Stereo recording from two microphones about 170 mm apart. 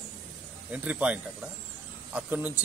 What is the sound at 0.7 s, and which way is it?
Speech, 5° right (ahead or behind).